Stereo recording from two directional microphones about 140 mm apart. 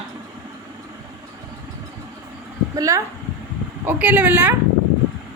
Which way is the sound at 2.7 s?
25° right (ahead or behind).